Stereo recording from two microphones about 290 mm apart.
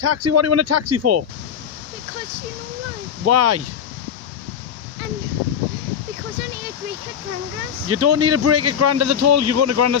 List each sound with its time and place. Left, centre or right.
0.0 s a man's voice: right
3.3 s a man's voice: right
7.9 s a man's voice: right